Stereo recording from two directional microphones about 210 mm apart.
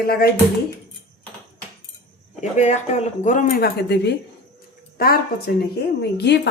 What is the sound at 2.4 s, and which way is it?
A woman's voice, 35° left (ahead or behind).